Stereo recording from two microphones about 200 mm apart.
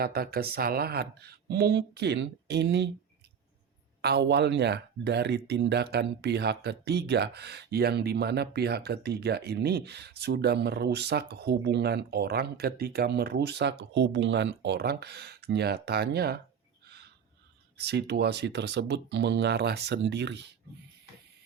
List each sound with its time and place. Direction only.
0.0 s speech: 50° right (ahead or behind)
4.0 s speech: 55° right (ahead or behind)
17.7 s speech: 55° right (ahead or behind)